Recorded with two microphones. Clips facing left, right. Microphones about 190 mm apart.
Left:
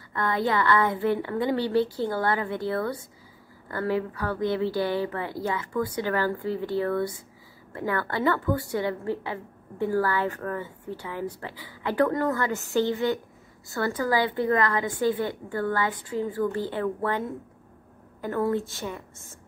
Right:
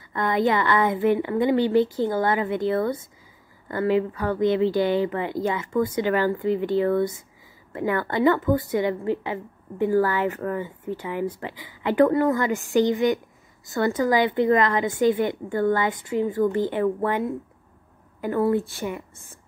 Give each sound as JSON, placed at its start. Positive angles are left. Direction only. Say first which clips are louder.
{"t": 0.1, "sound": "a woman's voice", "louder": "right 4 dB", "side_deg": -20}
{"t": 18.2, "sound": "a woman's voice", "louder": "right 4 dB", "side_deg": -10}